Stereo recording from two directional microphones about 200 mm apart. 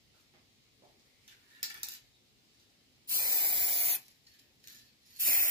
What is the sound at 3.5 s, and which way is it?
Spray, 25° right (ahead or behind).